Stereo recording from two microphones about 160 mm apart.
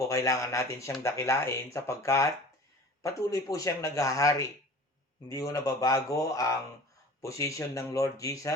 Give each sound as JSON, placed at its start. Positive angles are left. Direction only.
{"t": 0.0, "sound": "a man's voice", "side_deg": 20}